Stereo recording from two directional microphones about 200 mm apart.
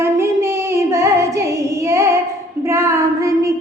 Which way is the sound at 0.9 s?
15° right (ahead or behind).